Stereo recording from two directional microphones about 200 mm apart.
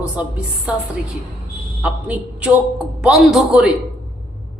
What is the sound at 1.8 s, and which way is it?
A man's voice, 5° right (ahead or behind).